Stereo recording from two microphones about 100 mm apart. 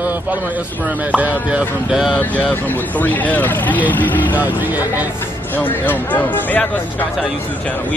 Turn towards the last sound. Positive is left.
turn(degrees=15)  # may be behind; listen again after turning